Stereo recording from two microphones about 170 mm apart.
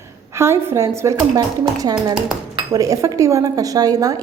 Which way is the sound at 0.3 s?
15° right (ahead or behind).